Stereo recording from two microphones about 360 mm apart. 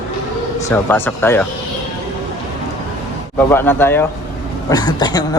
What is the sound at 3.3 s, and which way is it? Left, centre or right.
Speech, centre.